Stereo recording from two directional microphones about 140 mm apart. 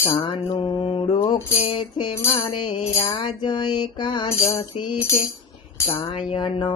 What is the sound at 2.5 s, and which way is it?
Mantra, 35° left (ahead or behind).